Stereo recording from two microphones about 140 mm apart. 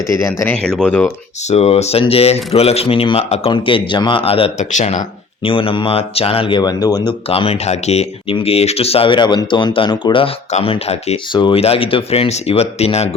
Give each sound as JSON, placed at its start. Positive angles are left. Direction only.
{"t": 0.1, "sound": "speech", "side_deg": 20}
{"t": 0.5, "sound": "speech", "side_deg": 5}
{"t": 1.5, "sound": "speech", "side_deg": 50}
{"t": 3.5, "sound": "speech", "side_deg": 35}
{"t": 4.7, "sound": "speech", "side_deg": 60}
{"t": 5.4, "sound": "speech", "side_deg": 40}
{"t": 7.3, "sound": "speech", "side_deg": 45}
{"t": 11.3, "sound": "speech", "side_deg": 35}